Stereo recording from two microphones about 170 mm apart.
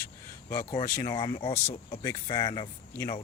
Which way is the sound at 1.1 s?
25° left (ahead or behind).